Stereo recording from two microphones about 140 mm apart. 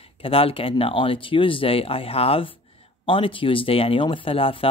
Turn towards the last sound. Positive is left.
turn(degrees=40)  # may be behind; listen again after turning